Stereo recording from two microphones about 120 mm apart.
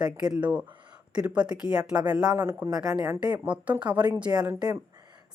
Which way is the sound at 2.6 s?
35° right (ahead or behind).